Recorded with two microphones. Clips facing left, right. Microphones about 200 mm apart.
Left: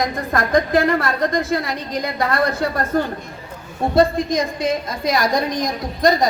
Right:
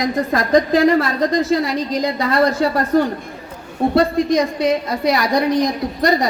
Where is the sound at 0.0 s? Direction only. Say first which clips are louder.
Right 3 dB; 55° left (ahead or behind).